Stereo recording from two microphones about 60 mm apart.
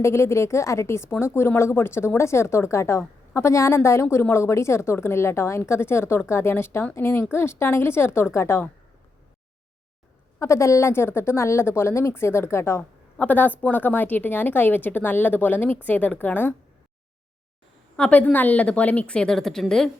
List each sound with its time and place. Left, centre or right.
0.0 s a woman's voice: left
10.4 s a woman's voice: left
13.1 s a woman's voice: left
18.1 s a woman's voice: left; by 19.9 s centre